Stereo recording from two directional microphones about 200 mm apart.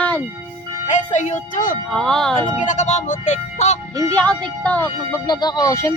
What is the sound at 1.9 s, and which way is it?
Speech, 5° left (ahead or behind).